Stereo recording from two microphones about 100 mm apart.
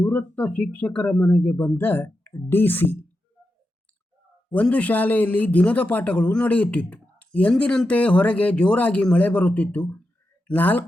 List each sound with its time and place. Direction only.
0.0 s speech: 15° left (ahead or behind)
4.4 s speech: 15° left (ahead or behind)